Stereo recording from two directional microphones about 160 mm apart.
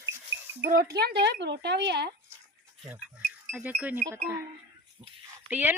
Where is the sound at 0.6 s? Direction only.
65° right (ahead or behind).